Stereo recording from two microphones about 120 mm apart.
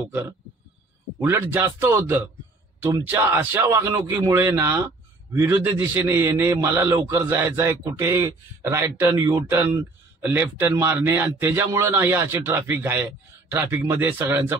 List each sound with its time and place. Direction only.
1.2 s a man's voice: 15° right (ahead or behind)